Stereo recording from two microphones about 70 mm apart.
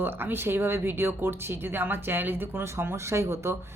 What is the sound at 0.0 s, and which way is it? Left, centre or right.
A woman's voice, right.